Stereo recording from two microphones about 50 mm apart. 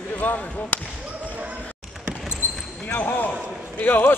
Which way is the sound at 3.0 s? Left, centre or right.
Left.